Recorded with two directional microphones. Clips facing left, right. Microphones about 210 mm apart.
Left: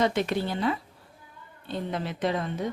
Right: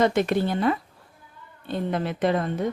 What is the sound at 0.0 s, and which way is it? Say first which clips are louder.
Speech: right 4 dB; 50° right (ahead or behind).